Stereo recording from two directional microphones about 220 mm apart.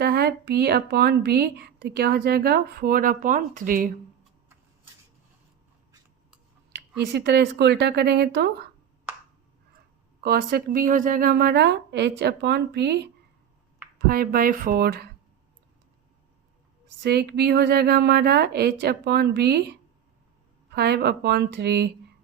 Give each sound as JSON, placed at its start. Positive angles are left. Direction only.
{"t": 0.0, "sound": "speech", "side_deg": -45}
{"t": 6.7, "sound": "speech", "side_deg": -45}
{"t": 10.2, "sound": "speech", "side_deg": -40}
{"t": 14.1, "sound": "speech", "side_deg": -40}
{"t": 17.0, "sound": "speech", "side_deg": -45}
{"t": 20.7, "sound": "speech", "side_deg": -45}